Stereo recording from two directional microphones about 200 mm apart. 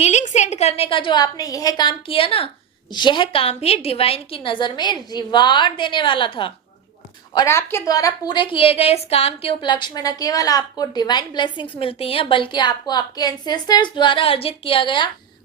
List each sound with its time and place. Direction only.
0.0 s a woman's voice: 35° left (ahead or behind)
7.3 s a woman's voice: 15° left (ahead or behind)